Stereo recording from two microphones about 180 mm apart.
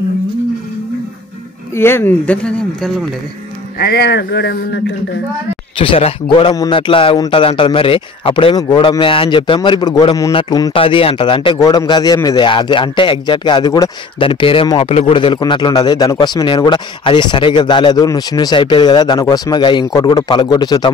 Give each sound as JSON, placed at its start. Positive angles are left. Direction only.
{"t": 1.8, "sound": "speech", "side_deg": 15}
{"t": 3.8, "sound": "speech", "side_deg": 65}
{"t": 5.8, "sound": "speech", "side_deg": 30}